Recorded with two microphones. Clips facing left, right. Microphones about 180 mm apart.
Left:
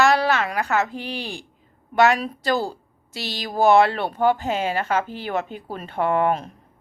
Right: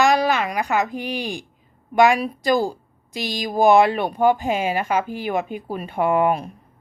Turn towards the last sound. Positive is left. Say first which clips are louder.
# right 2 dB
turn(degrees=-10)  # may be behind; listen again after turning